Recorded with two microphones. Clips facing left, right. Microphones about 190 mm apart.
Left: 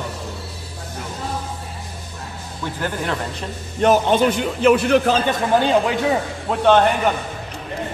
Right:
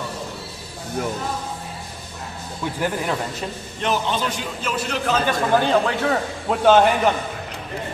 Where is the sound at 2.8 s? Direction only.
5° right (ahead or behind).